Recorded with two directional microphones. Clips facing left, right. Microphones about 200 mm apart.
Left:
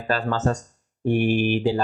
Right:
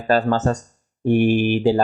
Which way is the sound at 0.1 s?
40° right (ahead or behind).